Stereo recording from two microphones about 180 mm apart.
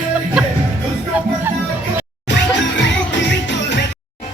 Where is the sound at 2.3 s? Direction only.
75° left (ahead or behind).